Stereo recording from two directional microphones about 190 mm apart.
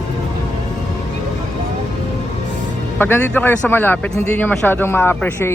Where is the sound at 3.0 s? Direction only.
10° left (ahead or behind).